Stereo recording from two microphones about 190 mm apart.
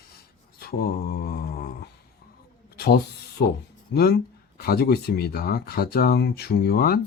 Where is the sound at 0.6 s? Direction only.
55° left (ahead or behind).